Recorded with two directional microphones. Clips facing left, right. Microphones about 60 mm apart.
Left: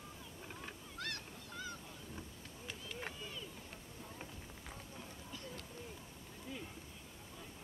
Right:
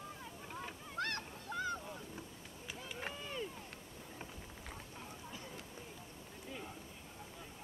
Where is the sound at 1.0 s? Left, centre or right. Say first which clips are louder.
Right 7 dB; right.